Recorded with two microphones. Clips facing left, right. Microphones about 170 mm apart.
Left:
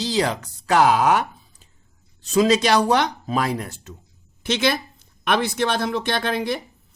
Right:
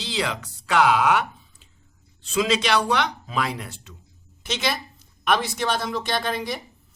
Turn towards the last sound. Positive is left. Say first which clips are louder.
# left 3 dB
turn(degrees=55)  # may be behind; listen again after turning